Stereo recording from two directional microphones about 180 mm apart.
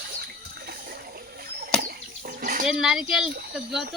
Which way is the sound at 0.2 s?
60° right (ahead or behind).